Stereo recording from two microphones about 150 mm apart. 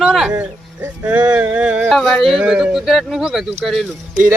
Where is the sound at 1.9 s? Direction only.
Centre (ahead or behind).